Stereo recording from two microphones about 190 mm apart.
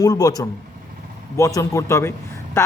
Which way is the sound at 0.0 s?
20° left (ahead or behind).